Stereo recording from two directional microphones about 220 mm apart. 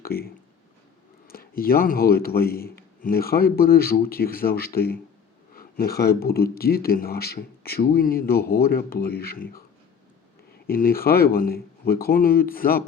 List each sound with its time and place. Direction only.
0.0 s speech: 45° left (ahead or behind)
1.3 s speech: 40° left (ahead or behind)
10.7 s speech: 40° left (ahead or behind)